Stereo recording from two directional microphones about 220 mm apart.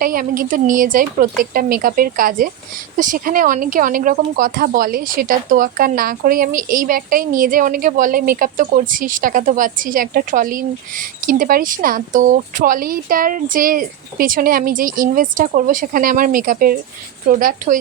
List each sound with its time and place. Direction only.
0.0 s speech: 40° right (ahead or behind)